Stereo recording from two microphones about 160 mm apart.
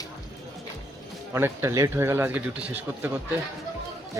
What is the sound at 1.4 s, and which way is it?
Speech, 15° right (ahead or behind).